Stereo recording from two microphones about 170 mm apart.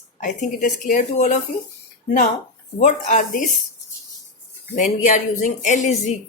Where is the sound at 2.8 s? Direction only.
45° left (ahead or behind).